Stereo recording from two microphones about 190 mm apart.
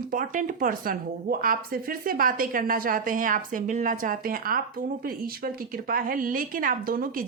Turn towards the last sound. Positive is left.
turn(degrees=-50)  # may be behind; listen again after turning